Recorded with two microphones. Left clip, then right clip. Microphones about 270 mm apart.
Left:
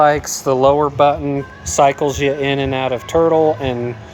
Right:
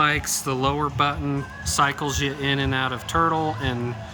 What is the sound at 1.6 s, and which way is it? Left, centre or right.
Speech, centre.